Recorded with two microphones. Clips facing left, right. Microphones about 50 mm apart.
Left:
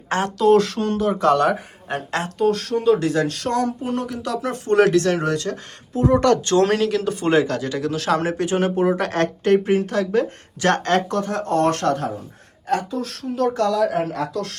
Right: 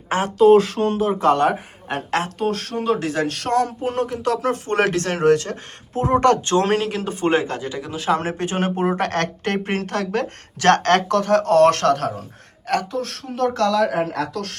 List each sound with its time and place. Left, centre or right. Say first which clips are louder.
0.1 s speech: right 3 dB; centre
2.4 s speech: left 4 dB; right; by 8.2 s centre
8.2 s speech: left 2 dB; right
9.0 s speech: left 1 dB; right
12.6 s speech: even; right
13.5 s speech: right 2 dB; right